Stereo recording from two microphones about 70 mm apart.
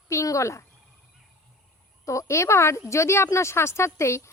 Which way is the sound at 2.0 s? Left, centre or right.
Left.